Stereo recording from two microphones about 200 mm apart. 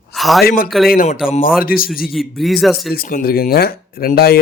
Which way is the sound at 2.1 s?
Centre (ahead or behind).